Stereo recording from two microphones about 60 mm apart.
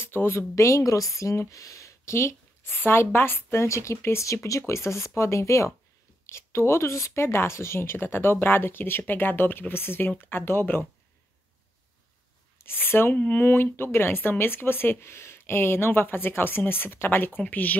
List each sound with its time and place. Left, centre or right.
0.0 s a woman's voice: left
12.5 s speech: left